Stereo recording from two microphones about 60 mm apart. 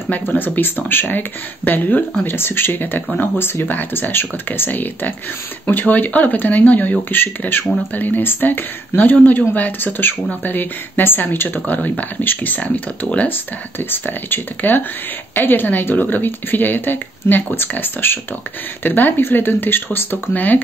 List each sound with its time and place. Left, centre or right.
0.4 s speech: left
3.6 s speech: left
13.3 s speech: left